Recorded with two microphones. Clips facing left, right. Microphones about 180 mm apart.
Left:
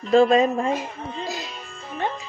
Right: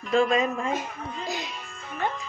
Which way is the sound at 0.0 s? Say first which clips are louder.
Left 6 dB; 35° left (ahead or behind).